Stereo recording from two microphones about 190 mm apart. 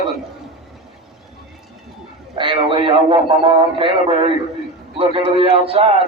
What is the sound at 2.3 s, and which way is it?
A man's voice, 25° right (ahead or behind).